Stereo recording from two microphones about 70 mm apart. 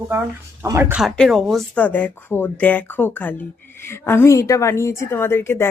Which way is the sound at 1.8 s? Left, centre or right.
Left.